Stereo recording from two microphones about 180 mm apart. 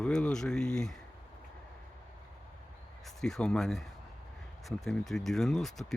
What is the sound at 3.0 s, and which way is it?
Speech, centre (ahead or behind).